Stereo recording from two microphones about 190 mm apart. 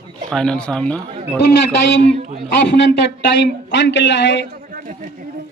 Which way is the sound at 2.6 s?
65° left (ahead or behind).